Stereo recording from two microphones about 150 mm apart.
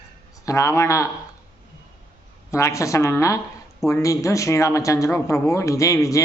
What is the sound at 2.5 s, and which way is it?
Speech, 20° left (ahead or behind).